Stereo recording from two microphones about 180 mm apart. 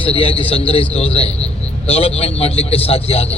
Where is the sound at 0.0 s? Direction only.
30° left (ahead or behind).